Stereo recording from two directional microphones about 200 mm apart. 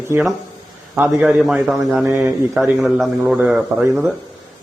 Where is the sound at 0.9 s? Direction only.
10° right (ahead or behind).